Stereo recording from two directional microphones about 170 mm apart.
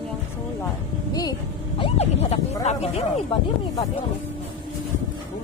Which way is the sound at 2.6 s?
40° left (ahead or behind).